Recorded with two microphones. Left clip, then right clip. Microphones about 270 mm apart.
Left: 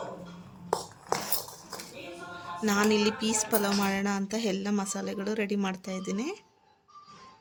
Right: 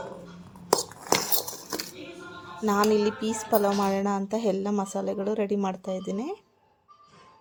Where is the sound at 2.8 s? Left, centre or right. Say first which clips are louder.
Right 2 dB; centre.